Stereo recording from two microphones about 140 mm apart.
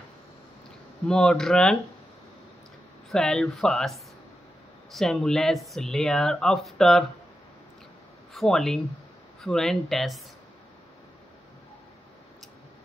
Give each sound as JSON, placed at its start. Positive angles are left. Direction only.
{"t": 1.0, "sound": "speech", "side_deg": 5}
{"t": 3.1, "sound": "speech", "side_deg": 5}
{"t": 8.3, "sound": "speech", "side_deg": 5}